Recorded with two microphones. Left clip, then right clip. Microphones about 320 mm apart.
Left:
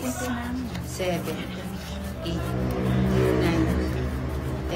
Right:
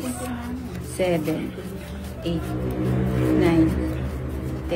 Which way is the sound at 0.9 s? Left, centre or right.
Right.